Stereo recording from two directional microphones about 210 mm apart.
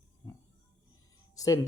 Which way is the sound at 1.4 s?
15° left (ahead or behind).